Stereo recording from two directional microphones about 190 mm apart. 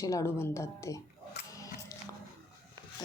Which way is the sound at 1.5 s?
20° left (ahead or behind).